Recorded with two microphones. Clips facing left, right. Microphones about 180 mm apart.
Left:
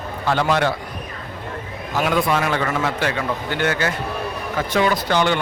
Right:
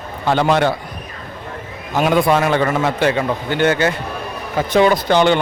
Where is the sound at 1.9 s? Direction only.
25° right (ahead or behind).